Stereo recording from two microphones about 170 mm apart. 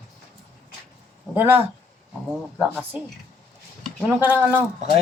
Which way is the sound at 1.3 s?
10° right (ahead or behind).